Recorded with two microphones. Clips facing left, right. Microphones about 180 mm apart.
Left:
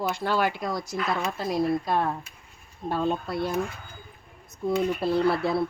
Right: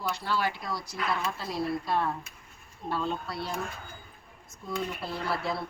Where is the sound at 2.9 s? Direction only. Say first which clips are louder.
Left 5 dB; 50° left (ahead or behind).